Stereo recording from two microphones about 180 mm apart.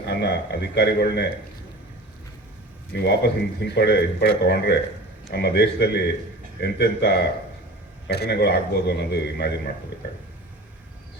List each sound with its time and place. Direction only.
0.1 s a man's voice: 70° left (ahead or behind)
3.0 s a man's voice: 70° left (ahead or behind)